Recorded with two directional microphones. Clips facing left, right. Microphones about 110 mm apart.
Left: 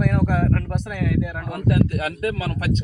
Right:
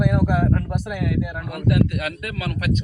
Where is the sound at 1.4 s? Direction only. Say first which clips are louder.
Right 1 dB; 30° left (ahead or behind).